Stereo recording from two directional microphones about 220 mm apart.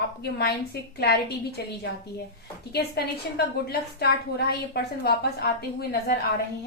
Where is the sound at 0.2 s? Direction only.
45° left (ahead or behind).